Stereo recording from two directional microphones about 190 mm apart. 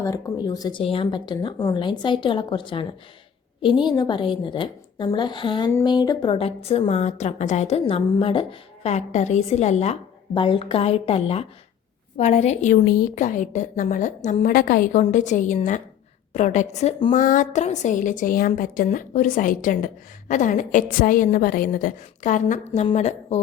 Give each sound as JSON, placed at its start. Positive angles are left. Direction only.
{"t": 0.0, "sound": "a woman's voice", "side_deg": 20}
{"t": 3.8, "sound": "a woman's voice", "side_deg": 20}